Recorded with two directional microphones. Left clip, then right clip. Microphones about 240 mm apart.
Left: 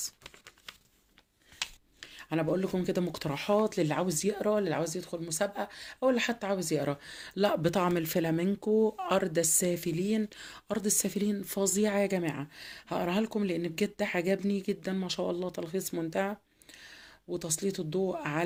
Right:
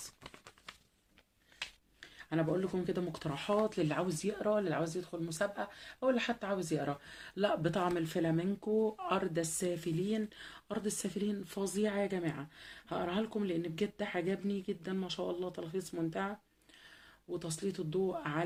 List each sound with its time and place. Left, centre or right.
2.0 s speech: left
17.3 s speech: left